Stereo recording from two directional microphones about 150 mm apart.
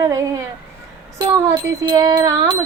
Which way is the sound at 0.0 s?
25° right (ahead or behind).